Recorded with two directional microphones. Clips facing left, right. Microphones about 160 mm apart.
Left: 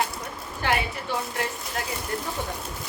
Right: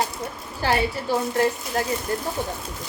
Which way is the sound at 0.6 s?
35° right (ahead or behind).